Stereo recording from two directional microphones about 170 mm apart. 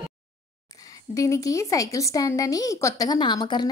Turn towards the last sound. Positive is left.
turn(degrees=25)  # may be behind; listen again after turning